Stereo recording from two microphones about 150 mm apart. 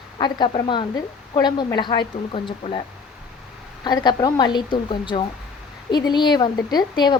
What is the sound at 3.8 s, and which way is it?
A woman's voice, 30° left (ahead or behind).